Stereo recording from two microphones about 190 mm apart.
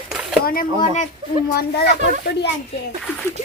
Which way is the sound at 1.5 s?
55° left (ahead or behind).